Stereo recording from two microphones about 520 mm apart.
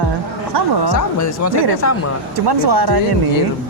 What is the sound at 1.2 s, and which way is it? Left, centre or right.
Speech, left.